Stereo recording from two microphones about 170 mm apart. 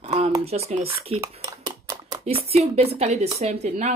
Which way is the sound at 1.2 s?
20° right (ahead or behind).